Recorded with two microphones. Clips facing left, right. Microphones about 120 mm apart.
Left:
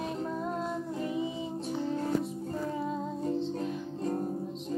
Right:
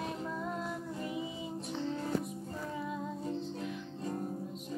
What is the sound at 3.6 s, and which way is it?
Music, 35° left (ahead or behind).